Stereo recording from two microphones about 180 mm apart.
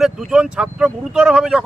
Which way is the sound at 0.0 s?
5° right (ahead or behind).